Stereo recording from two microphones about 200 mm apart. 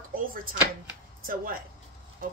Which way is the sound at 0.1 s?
45° right (ahead or behind).